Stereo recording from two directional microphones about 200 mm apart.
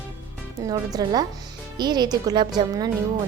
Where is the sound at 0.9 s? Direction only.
20° right (ahead or behind).